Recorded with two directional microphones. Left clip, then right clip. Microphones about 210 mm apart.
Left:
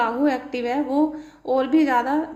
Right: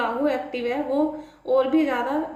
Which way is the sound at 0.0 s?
50° left (ahead or behind).